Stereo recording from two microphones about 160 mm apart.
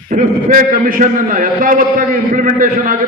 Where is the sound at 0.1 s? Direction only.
55° right (ahead or behind).